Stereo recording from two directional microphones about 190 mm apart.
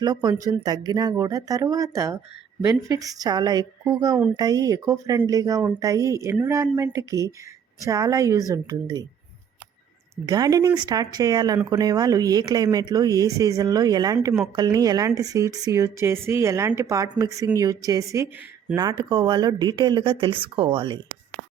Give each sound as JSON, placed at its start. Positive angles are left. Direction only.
{"t": 0.0, "sound": "speech", "side_deg": -20}
{"t": 10.2, "sound": "speech", "side_deg": -20}